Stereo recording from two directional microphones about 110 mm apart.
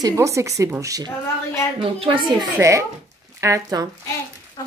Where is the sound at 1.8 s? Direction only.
50° right (ahead or behind).